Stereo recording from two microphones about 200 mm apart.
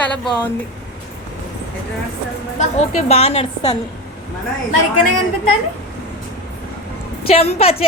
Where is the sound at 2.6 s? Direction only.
30° left (ahead or behind).